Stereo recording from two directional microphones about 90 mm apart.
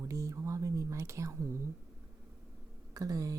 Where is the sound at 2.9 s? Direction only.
40° right (ahead or behind).